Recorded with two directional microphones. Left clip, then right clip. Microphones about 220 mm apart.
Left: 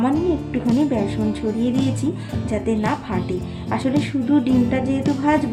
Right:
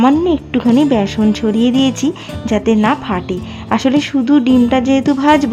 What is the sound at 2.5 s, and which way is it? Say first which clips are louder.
Speech: right 9 dB; 35° right (ahead or behind).